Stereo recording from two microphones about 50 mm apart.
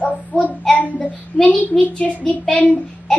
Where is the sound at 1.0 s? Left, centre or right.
Left.